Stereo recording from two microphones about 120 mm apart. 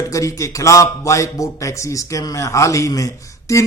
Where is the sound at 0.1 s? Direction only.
25° left (ahead or behind).